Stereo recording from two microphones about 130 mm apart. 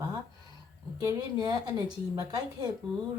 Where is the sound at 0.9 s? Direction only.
30° right (ahead or behind).